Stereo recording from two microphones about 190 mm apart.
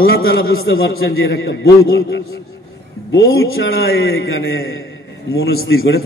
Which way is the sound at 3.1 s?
80° left.